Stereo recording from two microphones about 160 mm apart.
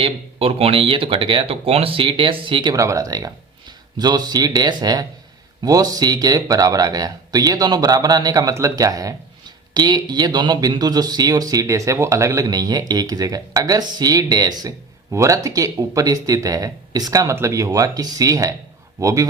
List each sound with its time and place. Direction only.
0.0 s speech: 35° right (ahead or behind); by 19.3 s 20° right (ahead or behind)